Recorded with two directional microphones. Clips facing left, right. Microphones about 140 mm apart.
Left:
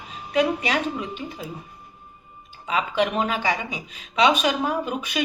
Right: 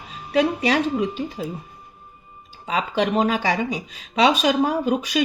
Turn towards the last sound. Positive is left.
turn(degrees=-40)  # may be behind; listen again after turning